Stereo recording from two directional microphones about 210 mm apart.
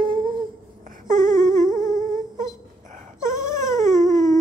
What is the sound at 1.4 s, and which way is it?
Humming, 15° left (ahead or behind).